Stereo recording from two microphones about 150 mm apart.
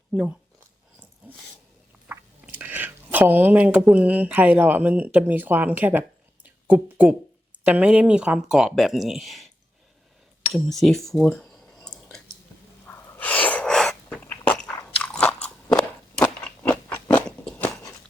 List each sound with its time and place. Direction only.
2.0 s speech: 10° right (ahead or behind)
10.5 s a sound: centre (ahead or behind)
12.9 s sneeze: 10° left (ahead or behind)
15.4 s crunch: 5° left (ahead or behind)